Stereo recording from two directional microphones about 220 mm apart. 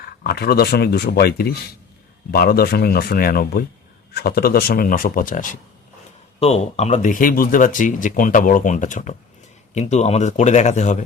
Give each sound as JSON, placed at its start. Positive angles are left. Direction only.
{"t": 0.0, "sound": "speech", "side_deg": 45}